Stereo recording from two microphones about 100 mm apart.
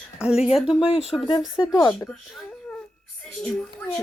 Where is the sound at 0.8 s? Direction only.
85° left.